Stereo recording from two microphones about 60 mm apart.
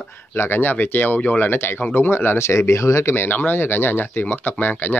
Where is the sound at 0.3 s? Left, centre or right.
Left.